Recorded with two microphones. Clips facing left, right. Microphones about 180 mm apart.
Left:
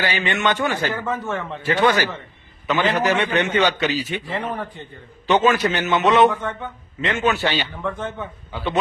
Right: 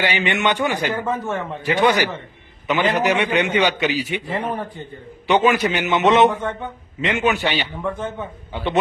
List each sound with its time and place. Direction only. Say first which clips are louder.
0.0 s a man's voice: right 1 dB; 20° right (ahead or behind)